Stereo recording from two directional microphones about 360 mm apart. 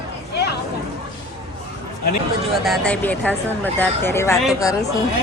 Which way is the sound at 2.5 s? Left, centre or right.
Centre.